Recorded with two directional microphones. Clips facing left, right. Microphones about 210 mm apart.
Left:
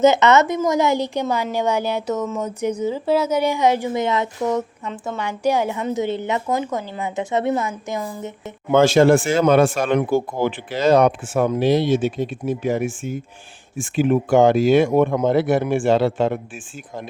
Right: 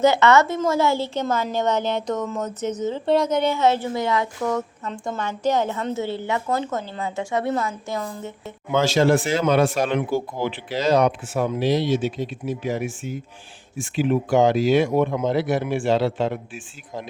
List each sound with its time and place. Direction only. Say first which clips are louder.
0.0 s a woman's voice: left 2 dB; 20° left (ahead or behind)
4.9 s a woman's voice: left 1 dB; centre (ahead or behind)
5.2 s a woman's voice: left 2 dB; 10° left (ahead or behind)
8.7 s speech: left 5 dB; 50° left (ahead or behind)